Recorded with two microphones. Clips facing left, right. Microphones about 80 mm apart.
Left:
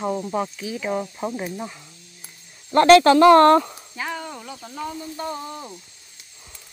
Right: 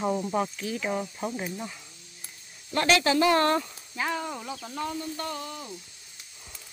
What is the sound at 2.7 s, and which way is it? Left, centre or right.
Speech, left.